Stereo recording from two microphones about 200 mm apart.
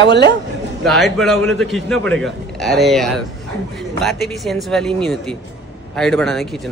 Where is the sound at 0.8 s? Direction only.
Centre (ahead or behind).